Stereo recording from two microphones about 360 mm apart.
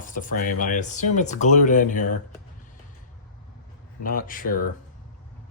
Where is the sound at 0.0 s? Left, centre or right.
Left.